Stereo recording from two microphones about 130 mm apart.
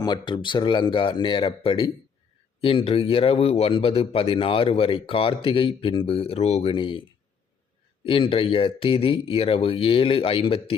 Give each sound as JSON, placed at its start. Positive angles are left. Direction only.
{"t": 0.0, "sound": "a man's voice", "side_deg": 30}
{"t": 8.0, "sound": "a man's voice", "side_deg": 45}